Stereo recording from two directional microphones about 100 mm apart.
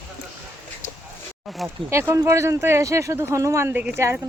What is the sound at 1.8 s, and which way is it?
Speech, 30° right (ahead or behind).